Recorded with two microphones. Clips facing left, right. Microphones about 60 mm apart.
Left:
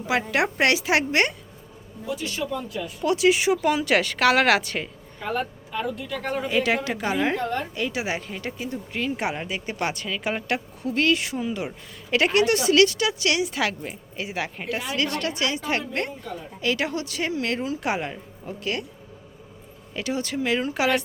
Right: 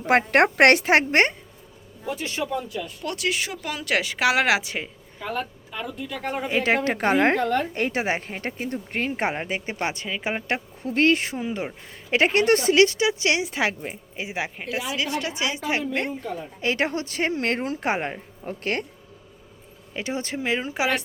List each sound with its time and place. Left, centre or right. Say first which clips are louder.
0.0 s a woman's voice: right 5 dB; right
2.6 s speech: left 5 dB; centre
3.8 s a woman's voice: right 2 dB; centre
5.2 s speech: left 2 dB; centre
6.3 s a woman's voice: left 1 dB; right
6.6 s a woman's voice: right 3 dB; right
7.7 s a woman's voice: right 3 dB; right; by 14.5 s centre
14.5 s a woman's voice: even; centre; by 18.9 s right
19.9 s a woman's voice: left 1 dB; right